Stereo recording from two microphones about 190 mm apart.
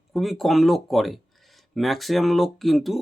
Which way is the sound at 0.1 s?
Centre (ahead or behind).